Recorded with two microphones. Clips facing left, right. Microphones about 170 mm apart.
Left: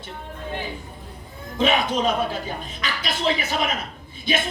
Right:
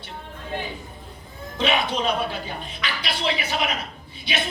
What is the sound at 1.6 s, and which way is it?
Speech, 45° left (ahead or behind).